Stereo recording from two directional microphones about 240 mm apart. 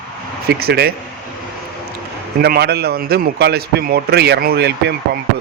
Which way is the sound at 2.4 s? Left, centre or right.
Right.